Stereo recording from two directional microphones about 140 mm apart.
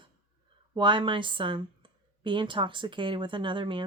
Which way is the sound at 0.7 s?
35° right (ahead or behind).